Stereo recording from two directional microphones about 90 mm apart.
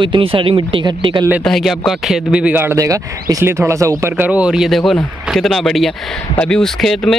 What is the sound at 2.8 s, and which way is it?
Speech, 35° right (ahead or behind).